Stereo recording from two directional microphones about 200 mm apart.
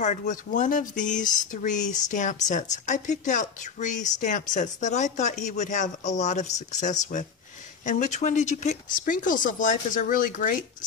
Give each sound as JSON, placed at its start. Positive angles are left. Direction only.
{"t": 0.0, "sound": "a woman's voice", "side_deg": 35}